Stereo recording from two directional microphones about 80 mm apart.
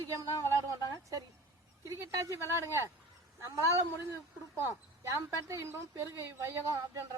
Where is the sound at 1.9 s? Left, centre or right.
Right.